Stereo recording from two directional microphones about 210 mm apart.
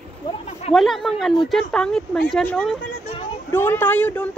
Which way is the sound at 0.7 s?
Centre (ahead or behind).